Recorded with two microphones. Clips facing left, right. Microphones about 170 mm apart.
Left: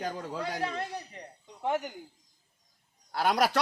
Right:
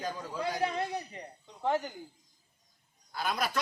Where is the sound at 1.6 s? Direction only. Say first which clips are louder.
Even; 15° left (ahead or behind).